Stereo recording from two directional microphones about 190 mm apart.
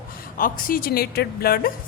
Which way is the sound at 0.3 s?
50° left (ahead or behind).